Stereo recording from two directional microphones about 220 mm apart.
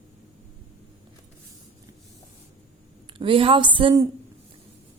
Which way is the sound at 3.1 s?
25° right (ahead or behind).